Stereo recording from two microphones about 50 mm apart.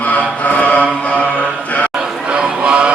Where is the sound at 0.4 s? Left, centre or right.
Left.